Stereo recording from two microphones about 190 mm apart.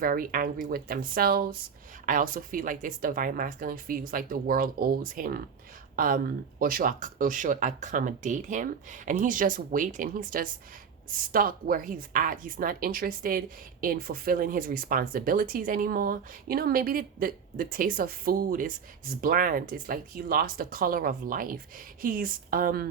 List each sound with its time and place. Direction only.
0.0 s speech: 50° right (ahead or behind)